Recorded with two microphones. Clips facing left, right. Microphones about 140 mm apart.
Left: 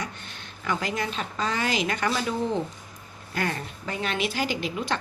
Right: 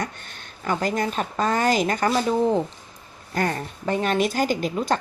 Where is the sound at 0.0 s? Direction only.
45° right (ahead or behind).